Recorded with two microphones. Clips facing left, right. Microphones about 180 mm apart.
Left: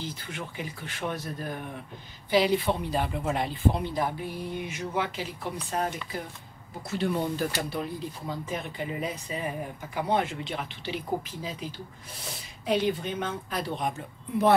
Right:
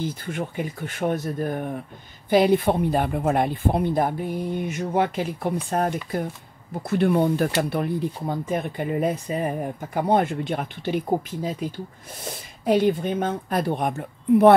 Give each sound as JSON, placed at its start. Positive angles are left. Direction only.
{"t": 0.0, "sound": "speech", "side_deg": -50}